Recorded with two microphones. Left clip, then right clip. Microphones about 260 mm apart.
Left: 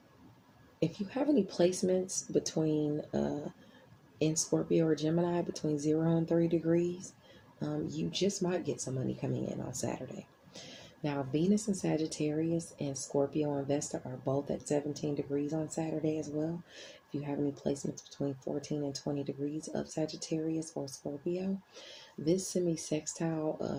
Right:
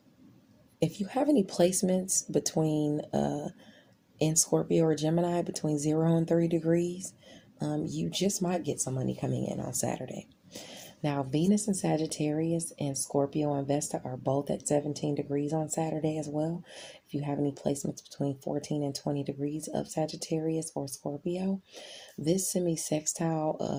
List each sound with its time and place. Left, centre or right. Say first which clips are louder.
0.8 s speech: right 4 dB; right